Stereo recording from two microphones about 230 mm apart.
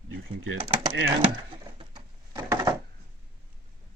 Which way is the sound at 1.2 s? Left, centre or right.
Right.